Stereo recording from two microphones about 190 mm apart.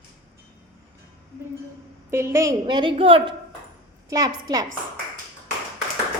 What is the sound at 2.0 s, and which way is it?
A woman's voice, 15° right (ahead or behind).